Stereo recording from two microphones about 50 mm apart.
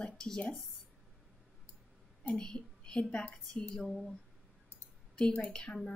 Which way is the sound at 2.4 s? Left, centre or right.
Centre.